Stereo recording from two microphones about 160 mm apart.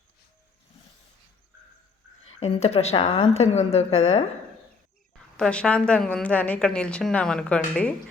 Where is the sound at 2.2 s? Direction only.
40° left (ahead or behind).